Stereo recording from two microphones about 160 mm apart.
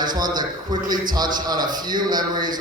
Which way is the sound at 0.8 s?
60° right (ahead or behind).